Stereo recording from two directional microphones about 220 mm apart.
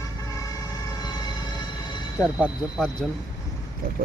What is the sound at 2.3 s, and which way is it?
Speech, 5° right (ahead or behind).